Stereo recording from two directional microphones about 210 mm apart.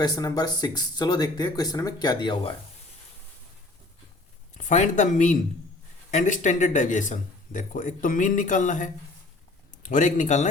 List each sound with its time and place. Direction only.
0.0 s speech: 20° left (ahead or behind)
4.5 s speech: 35° left (ahead or behind)